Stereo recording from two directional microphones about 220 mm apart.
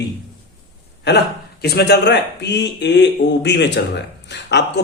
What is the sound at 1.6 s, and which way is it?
A man's voice, 45° left (ahead or behind).